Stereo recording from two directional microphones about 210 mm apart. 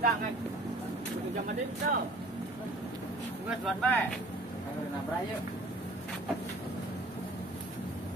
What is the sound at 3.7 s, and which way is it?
Speech, 5° left (ahead or behind).